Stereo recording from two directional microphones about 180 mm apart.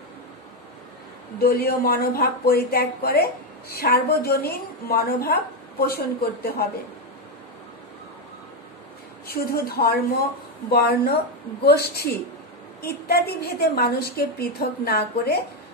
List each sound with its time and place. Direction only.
1.4 s a woman's voice: 60° left (ahead or behind)
9.3 s a woman's voice: 60° left (ahead or behind)